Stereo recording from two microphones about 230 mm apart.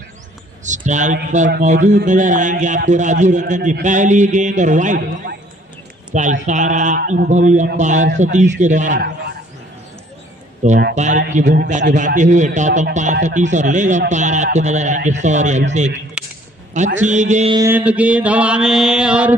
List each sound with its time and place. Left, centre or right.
0.6 s a man's voice: right
10.6 s a man's voice: right
16.2 s a sound: centre
16.7 s a man's voice: right
17.5 s mantra: centre